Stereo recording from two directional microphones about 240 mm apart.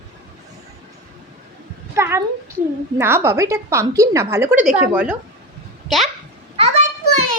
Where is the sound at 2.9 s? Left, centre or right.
Centre.